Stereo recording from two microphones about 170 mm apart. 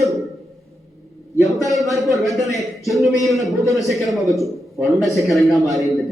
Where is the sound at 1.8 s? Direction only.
Centre (ahead or behind).